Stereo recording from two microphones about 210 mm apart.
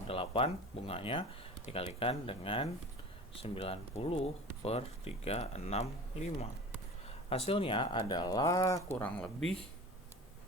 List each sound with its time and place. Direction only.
0.1 s speech: 25° left (ahead or behind); by 9.6 s 5° left (ahead or behind)